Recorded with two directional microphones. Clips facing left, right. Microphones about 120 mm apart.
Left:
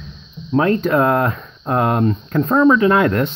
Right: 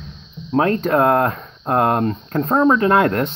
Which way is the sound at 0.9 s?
50° right (ahead or behind).